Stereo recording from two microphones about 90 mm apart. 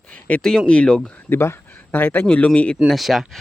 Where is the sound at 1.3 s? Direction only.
25° left (ahead or behind).